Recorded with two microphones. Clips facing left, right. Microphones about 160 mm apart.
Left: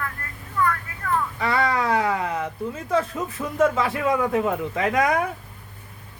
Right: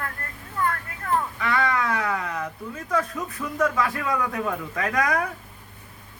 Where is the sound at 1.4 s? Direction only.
30° left (ahead or behind).